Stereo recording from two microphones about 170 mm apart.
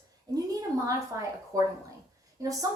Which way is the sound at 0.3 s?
20° right (ahead or behind).